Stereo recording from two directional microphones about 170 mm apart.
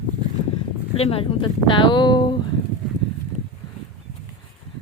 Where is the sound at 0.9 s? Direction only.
35° left (ahead or behind).